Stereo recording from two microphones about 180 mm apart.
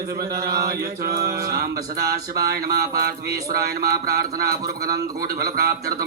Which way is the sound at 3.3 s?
20° right (ahead or behind).